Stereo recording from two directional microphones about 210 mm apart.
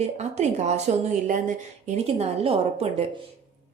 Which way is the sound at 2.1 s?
30° right (ahead or behind).